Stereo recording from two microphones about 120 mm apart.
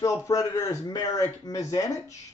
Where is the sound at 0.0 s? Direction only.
25° left (ahead or behind).